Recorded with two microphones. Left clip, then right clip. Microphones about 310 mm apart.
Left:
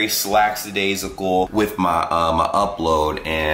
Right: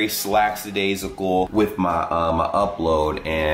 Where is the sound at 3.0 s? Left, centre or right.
Centre.